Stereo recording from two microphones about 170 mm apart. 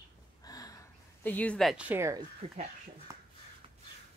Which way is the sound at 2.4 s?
35° right (ahead or behind).